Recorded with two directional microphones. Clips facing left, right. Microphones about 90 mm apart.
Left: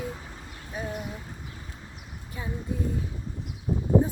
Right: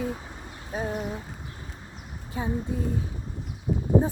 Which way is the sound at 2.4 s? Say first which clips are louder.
Right 6 dB; 30° right (ahead or behind).